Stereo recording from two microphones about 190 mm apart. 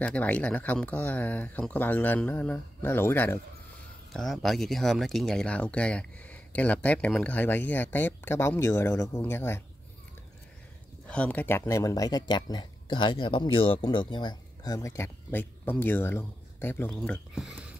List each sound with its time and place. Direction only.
0.0 s speech: 5° left (ahead or behind)
4.1 s speech: centre (ahead or behind)
11.1 s speech: 5° left (ahead or behind)